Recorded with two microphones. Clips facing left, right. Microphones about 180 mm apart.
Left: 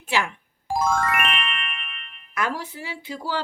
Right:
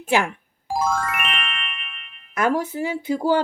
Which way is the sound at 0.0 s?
50° right (ahead or behind).